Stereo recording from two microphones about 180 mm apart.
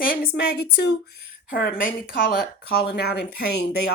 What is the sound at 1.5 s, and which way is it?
A woman's voice, 55° left (ahead or behind).